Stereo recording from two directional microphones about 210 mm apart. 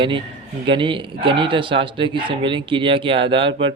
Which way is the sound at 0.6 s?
25° right (ahead or behind).